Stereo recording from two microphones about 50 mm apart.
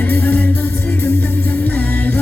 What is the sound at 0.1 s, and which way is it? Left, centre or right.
Music, left.